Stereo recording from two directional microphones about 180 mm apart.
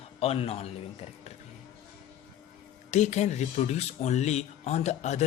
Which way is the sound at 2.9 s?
40° left (ahead or behind).